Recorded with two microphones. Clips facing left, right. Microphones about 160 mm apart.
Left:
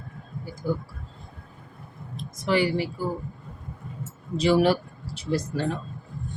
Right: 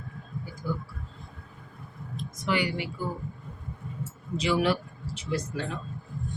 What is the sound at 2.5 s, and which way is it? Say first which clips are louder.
Speech: left 5 dB; 35° left (ahead or behind).